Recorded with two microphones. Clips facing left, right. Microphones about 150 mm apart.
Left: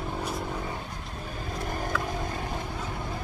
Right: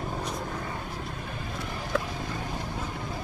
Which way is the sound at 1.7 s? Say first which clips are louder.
Left 4 dB; 45° left (ahead or behind).